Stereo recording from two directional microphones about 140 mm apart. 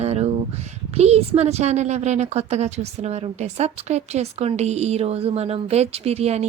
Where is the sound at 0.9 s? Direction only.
50° right (ahead or behind).